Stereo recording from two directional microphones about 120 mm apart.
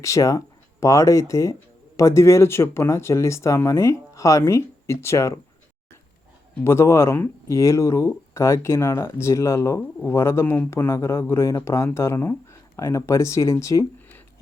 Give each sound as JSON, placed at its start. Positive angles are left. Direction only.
{"t": 0.0, "sound": "speech", "side_deg": 25}
{"t": 6.7, "sound": "speech", "side_deg": 20}